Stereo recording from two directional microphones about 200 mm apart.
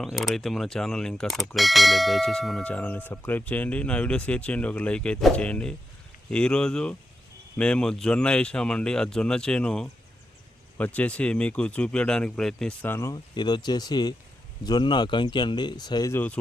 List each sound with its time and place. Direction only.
0.0 s speech: centre (ahead or behind)